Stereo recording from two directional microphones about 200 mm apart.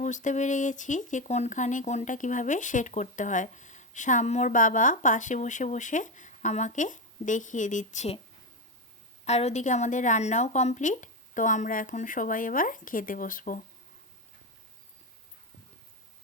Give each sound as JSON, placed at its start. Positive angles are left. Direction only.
{"t": 0.0, "sound": "speech", "side_deg": 40}
{"t": 9.2, "sound": "speech", "side_deg": 35}